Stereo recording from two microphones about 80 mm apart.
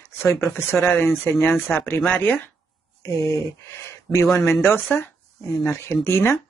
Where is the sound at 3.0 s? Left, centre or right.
Left.